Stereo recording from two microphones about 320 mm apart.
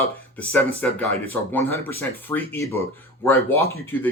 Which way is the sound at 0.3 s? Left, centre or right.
Centre.